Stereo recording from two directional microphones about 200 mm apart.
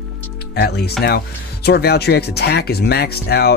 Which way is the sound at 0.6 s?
55° left (ahead or behind).